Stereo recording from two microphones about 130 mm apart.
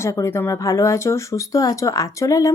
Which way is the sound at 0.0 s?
20° left (ahead or behind).